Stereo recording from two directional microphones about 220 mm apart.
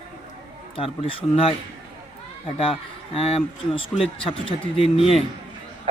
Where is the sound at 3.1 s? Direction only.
25° left (ahead or behind).